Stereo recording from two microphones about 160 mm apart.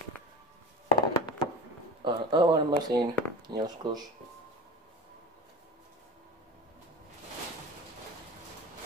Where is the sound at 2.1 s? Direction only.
30° right (ahead or behind).